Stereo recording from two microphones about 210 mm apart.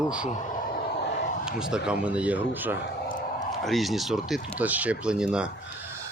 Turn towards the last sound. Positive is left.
turn(degrees=-5)  # may be behind; listen again after turning